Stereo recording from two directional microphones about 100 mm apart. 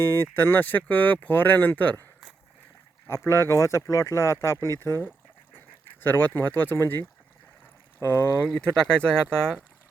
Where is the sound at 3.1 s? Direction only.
25° left (ahead or behind).